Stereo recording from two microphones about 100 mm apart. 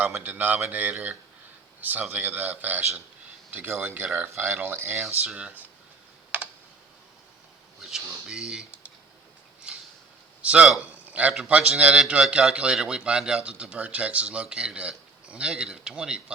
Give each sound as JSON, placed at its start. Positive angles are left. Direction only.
{"t": 0.0, "sound": "a man's voice", "side_deg": -20}
{"t": 5.0, "sound": "a man's voice", "side_deg": -10}
{"t": 6.3, "sound": "computer keyboard", "side_deg": -15}
{"t": 7.8, "sound": "speech", "side_deg": -5}
{"t": 9.7, "sound": "a sound", "side_deg": -10}
{"t": 10.4, "sound": "a man's voice", "side_deg": -15}